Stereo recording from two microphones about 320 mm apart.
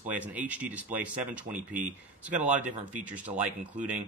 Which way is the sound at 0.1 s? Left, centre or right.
Centre.